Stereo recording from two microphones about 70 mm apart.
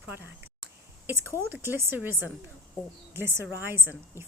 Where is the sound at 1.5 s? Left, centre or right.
Right.